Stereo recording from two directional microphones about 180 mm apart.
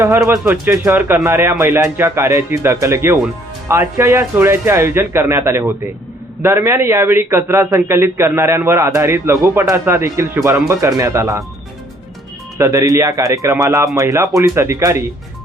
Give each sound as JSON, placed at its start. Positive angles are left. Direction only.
{"t": 0.0, "sound": "a man's voice", "side_deg": -15}
{"t": 12.5, "sound": "a man's voice", "side_deg": -20}